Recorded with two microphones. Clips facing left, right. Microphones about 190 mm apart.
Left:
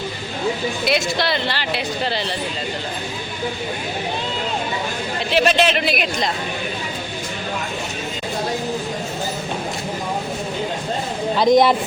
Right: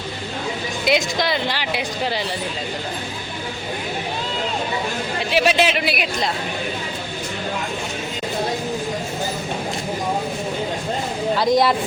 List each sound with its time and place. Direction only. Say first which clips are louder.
0.9 s speech: right 2 dB; 15° right (ahead or behind)
5.3 s speech: left 1 dB; 10° right (ahead or behind)
11.3 s speech: left 4 dB; 20° left (ahead or behind)